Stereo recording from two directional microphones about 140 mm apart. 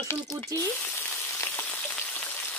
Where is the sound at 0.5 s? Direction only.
15° left (ahead or behind).